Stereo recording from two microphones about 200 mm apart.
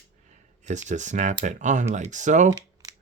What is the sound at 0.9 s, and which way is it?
Speech, 35° right (ahead or behind).